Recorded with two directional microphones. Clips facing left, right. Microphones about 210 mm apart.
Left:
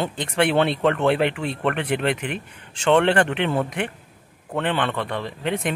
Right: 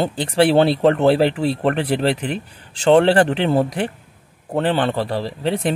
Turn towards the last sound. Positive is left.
turn(degrees=-35)  # may be behind; listen again after turning